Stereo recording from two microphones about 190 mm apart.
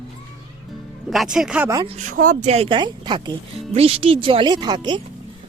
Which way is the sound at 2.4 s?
30° right (ahead or behind).